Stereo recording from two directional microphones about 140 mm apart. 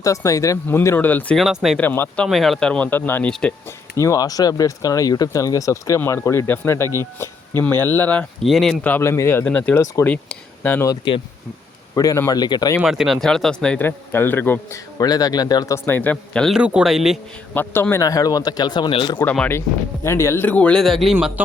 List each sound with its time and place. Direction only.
0.0 s speech: 25° left (ahead or behind)
1.4 s speech: centre (ahead or behind)
1.8 s speech: 10° left (ahead or behind)
8.4 s speech: centre (ahead or behind)
8.8 s speech: 15° left (ahead or behind)
9.7 s speech: 20° left (ahead or behind)
10.1 s speech: 10° left (ahead or behind)
10.8 s speech: 35° left (ahead or behind)
11.9 s speech: 20° left (ahead or behind)
12.8 s speech: centre (ahead or behind); by 14.8 s 15° left (ahead or behind)
14.9 s speech: 25° left (ahead or behind); by 16.6 s 5° left (ahead or behind)
16.6 s speech: 5° right (ahead or behind)
17.5 s speech: 15° left (ahead or behind); by 19.2 s 35° left (ahead or behind)
19.2 s speech: 10° left (ahead or behind); by 21.4 s 5° right (ahead or behind)